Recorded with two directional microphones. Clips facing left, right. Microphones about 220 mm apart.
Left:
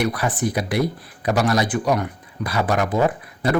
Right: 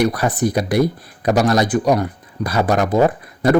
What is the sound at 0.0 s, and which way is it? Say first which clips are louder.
Speech: right 5 dB; 40° right (ahead or behind).